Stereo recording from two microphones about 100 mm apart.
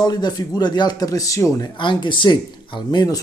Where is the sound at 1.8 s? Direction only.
50° left (ahead or behind).